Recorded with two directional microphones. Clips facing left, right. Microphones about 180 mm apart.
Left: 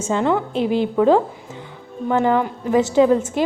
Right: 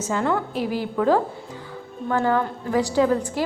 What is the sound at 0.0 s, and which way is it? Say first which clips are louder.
A woman's voice: left 4 dB; 25° left (ahead or behind).